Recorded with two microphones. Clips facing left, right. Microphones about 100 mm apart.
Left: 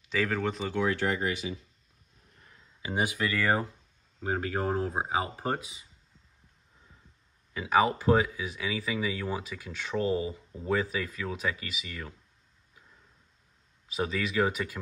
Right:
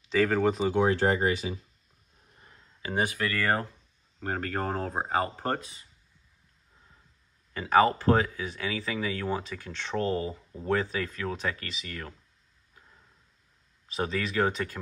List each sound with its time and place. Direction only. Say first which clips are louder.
0.1 s speech: right 5 dB; 5° right (ahead or behind)
0.7 s speech: right 1 dB; 30° right (ahead or behind)
2.8 s speech: right 1 dB; 15° left (ahead or behind)
7.5 s speech: right 3 dB; 5° left (ahead or behind)
13.8 s speech: even; centre (ahead or behind)